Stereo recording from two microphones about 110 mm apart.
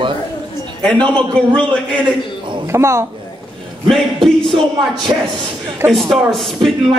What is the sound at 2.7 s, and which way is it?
Speech, 25° right (ahead or behind).